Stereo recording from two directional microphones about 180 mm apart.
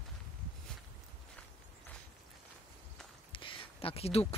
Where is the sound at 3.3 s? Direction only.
30° left (ahead or behind).